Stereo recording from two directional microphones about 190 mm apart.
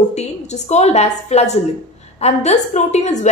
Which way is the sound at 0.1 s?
35° left (ahead or behind).